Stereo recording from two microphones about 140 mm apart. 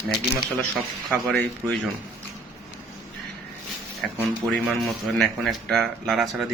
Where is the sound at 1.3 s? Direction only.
5° left (ahead or behind).